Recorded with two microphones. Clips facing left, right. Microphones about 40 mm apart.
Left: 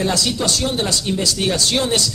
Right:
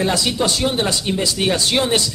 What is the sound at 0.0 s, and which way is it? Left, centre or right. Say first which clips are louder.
Speech: right 1 dB; right.